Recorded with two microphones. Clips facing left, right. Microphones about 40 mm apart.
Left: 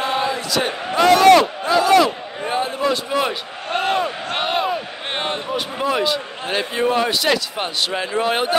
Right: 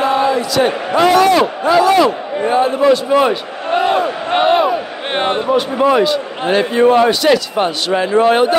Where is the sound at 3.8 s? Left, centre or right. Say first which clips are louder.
Right 5 dB; right.